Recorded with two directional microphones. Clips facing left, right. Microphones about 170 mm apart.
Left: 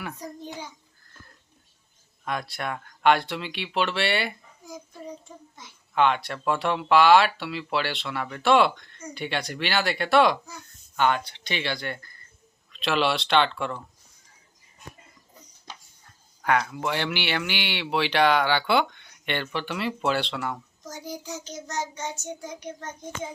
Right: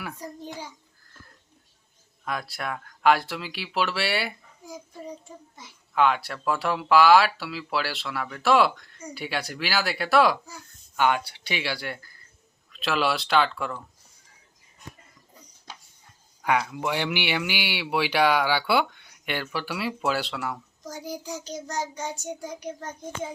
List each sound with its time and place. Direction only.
0.0 s speech: 5° right (ahead or behind)
2.2 s speech: centre (ahead or behind)
16.4 s speech: 10° right (ahead or behind)
21.4 s child singing: 35° right (ahead or behind)
21.8 s speech: 10° right (ahead or behind)